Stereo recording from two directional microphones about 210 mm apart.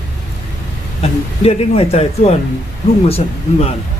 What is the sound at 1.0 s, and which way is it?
A man's voice, 30° left (ahead or behind).